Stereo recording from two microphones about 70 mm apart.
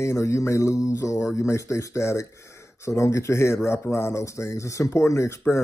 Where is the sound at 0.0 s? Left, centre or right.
Left.